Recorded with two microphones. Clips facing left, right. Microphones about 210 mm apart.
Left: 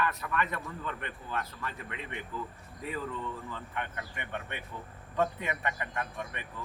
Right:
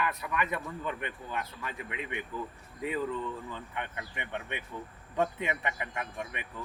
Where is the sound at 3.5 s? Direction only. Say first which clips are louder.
Even; 15° right (ahead or behind).